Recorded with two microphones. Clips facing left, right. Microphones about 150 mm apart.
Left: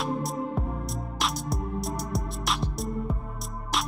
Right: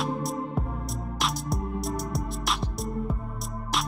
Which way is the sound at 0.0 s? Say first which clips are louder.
Even; centre (ahead or behind).